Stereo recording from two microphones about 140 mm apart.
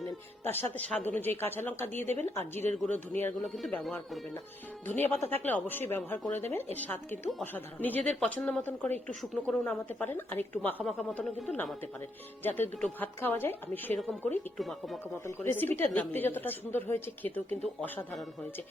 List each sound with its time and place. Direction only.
0.4 s a woman's voice: 15° left (ahead or behind)
2.0 s speech: 50° right (ahead or behind)
2.7 s a woman's voice: 10° left (ahead or behind)
4.9 s a woman's voice: 15° left (ahead or behind)
12.4 s a woman's voice: 15° left (ahead or behind)
14.6 s speech: centre (ahead or behind)
15.4 s a woman's voice: 15° left (ahead or behind)